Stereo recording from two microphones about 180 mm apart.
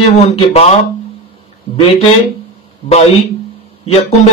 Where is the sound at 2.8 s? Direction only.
35° left (ahead or behind).